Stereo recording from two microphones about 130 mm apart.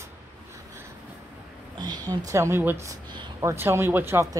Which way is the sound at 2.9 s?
35° right (ahead or behind).